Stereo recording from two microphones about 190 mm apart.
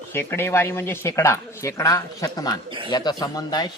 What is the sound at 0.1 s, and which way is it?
Speech, 10° left (ahead or behind).